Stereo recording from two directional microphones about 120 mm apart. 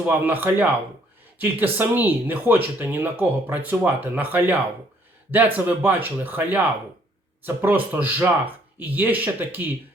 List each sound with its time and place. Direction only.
0.0 s speech: 15° right (ahead or behind)